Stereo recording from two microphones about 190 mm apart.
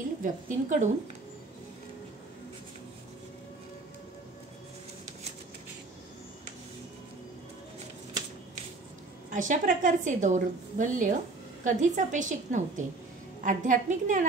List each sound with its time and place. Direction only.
0.2 s a woman's voice: 40° right (ahead or behind)
9.3 s a woman's voice: 40° right (ahead or behind)